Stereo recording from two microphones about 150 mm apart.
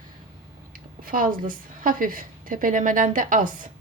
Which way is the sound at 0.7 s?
70° right (ahead or behind).